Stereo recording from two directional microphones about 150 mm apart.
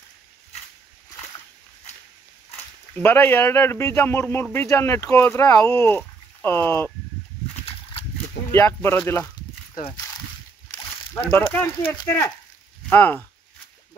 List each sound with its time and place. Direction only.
3.0 s speech: 15° left (ahead or behind)
8.5 s speech: 15° left (ahead or behind)
11.2 s speech: 10° left (ahead or behind)